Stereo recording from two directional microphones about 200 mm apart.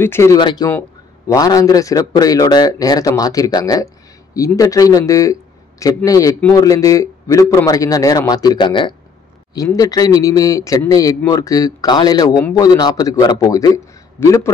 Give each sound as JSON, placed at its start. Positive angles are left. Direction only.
{"t": 0.0, "sound": "a man's voice", "side_deg": 15}